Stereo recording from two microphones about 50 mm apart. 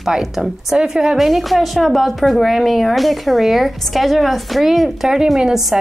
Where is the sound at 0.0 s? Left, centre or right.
Centre.